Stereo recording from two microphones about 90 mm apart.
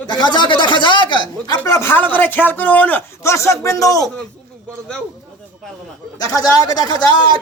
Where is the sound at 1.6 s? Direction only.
25° left (ahead or behind).